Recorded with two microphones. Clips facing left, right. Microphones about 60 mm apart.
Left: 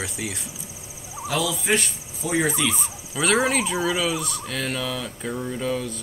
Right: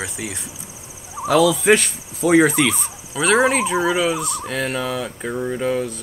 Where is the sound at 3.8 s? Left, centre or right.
Right.